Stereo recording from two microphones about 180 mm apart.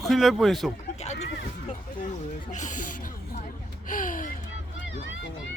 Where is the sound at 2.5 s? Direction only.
45° left (ahead or behind).